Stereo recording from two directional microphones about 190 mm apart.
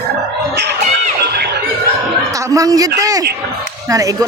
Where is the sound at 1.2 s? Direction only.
60° right (ahead or behind).